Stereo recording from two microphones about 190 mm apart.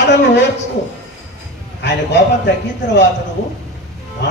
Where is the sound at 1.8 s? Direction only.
65° left (ahead or behind).